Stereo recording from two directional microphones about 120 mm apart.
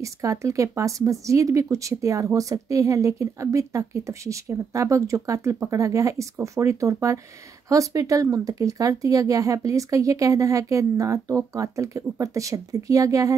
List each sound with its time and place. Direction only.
0.0 s speech: 25° right (ahead or behind)